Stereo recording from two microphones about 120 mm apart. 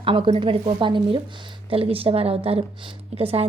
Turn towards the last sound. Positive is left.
turn(degrees=-55)  # may be behind; listen again after turning